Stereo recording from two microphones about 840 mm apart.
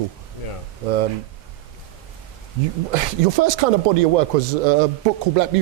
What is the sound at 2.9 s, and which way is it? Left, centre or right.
Speech, right.